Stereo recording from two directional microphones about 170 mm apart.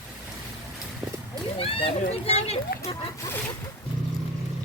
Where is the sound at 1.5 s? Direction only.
35° left (ahead or behind).